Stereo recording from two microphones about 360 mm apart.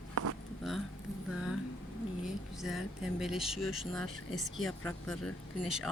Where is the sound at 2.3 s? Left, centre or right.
Centre.